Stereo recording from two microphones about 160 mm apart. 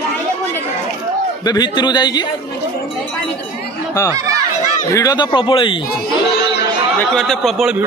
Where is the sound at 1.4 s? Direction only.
25° left (ahead or behind).